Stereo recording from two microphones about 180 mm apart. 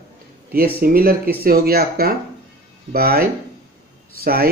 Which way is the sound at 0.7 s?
55° right (ahead or behind).